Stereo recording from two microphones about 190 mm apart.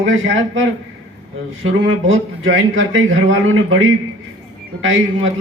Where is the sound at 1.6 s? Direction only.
90° right.